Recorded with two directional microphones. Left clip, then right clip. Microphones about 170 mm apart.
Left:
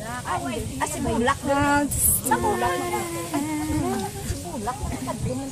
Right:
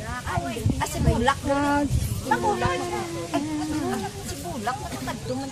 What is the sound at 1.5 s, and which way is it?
Speech, 15° left (ahead or behind).